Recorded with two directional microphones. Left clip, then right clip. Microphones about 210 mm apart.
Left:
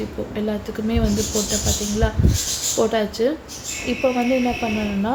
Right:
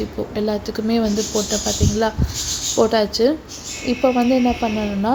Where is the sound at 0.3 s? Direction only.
25° right (ahead or behind).